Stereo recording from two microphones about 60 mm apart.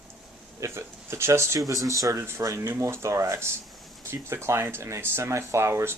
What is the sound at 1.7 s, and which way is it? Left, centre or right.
Speech, right.